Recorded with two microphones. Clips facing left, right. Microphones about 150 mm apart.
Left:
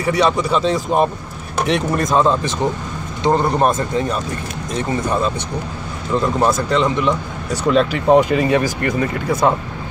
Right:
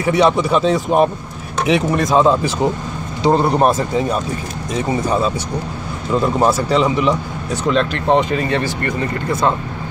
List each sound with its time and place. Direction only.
0.0 s speech: 5° right (ahead or behind)
6.1 s speech: 10° right (ahead or behind)
7.6 s speech: 5° left (ahead or behind)